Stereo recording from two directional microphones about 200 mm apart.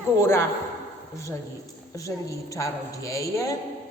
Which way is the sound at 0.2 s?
15° left (ahead or behind).